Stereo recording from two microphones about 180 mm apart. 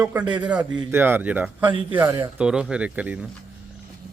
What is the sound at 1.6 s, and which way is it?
Speech, 30° right (ahead or behind).